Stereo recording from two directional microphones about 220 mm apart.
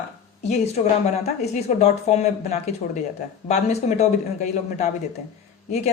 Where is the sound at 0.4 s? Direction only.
30° left (ahead or behind).